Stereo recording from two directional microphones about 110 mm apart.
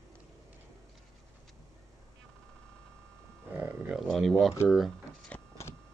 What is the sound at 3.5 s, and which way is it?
Cattle, 15° right (ahead or behind).